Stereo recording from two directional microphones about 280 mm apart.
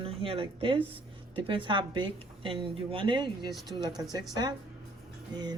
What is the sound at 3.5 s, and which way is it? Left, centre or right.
Speech, centre.